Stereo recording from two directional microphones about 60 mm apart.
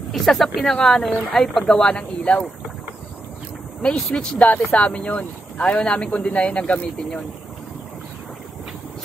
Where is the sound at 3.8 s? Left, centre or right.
Centre.